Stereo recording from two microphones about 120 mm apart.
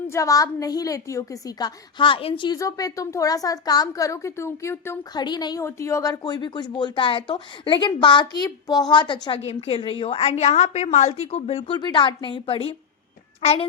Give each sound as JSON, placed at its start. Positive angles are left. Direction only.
{"t": 0.1, "sound": "speech", "side_deg": 25}
{"t": 2.6, "sound": "speech", "side_deg": 30}
{"t": 5.1, "sound": "speech", "side_deg": 35}
{"t": 5.6, "sound": "speech", "side_deg": 25}
{"t": 9.5, "sound": "a woman's voice", "side_deg": 55}
{"t": 11.8, "sound": "a woman's voice", "side_deg": 40}